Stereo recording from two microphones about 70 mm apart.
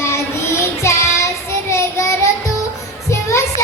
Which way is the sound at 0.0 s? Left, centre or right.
Left.